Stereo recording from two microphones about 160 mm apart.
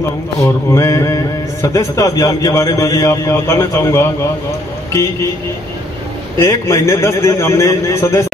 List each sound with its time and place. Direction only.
0.7 s a man's voice: 20° left (ahead or behind)
6.4 s a man's voice: 20° left (ahead or behind)